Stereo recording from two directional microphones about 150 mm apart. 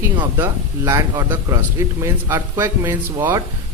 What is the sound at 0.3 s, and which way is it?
Speech, 20° right (ahead or behind).